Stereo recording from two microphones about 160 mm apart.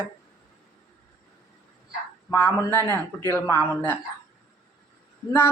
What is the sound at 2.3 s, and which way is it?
A woman's voice, 15° left (ahead or behind).